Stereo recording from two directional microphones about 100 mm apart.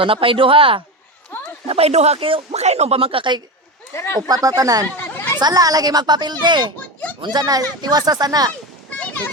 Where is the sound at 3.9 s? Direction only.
25° left (ahead or behind).